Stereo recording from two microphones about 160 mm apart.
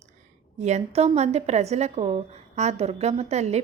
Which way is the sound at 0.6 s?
45° right (ahead or behind).